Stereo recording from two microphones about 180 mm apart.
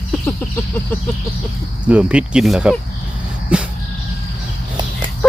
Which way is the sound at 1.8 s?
5° right (ahead or behind).